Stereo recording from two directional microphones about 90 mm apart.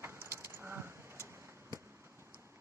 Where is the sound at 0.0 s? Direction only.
30° right (ahead or behind).